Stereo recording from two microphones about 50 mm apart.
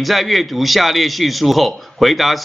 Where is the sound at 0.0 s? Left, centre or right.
Centre.